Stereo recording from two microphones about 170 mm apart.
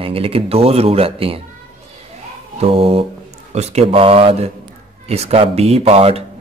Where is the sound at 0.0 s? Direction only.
35° right (ahead or behind).